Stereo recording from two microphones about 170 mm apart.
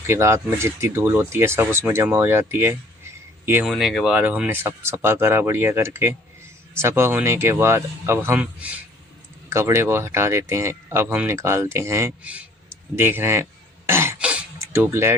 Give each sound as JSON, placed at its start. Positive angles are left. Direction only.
{"t": 0.1, "sound": "speech", "side_deg": -15}
{"t": 3.7, "sound": "speech", "side_deg": 0}
{"t": 13.0, "sound": "throat clearing", "side_deg": -15}